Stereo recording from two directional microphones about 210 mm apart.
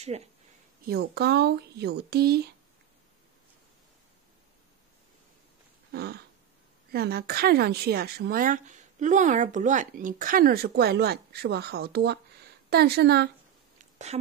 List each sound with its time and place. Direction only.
0.8 s a woman's voice: 50° right (ahead or behind)
5.9 s a sound: 50° right (ahead or behind)
6.9 s a woman's voice: 45° right (ahead or behind)